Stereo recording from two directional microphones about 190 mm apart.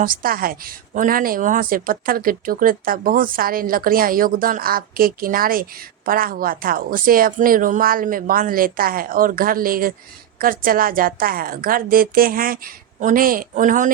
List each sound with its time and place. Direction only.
0.0 s a woman's voice: 50° right (ahead or behind)